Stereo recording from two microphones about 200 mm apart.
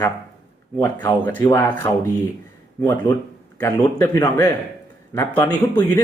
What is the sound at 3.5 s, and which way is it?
Speech, 15° left (ahead or behind).